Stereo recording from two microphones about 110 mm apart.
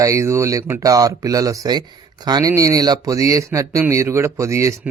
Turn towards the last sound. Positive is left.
turn(degrees=-25)  # may be behind; listen again after turning